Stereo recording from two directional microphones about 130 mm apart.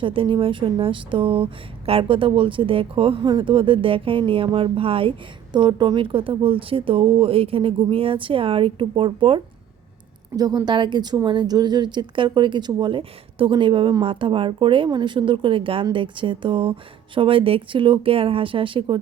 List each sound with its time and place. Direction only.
0.0 s speech: 40° right (ahead or behind)
10.3 s a woman's voice: 30° right (ahead or behind)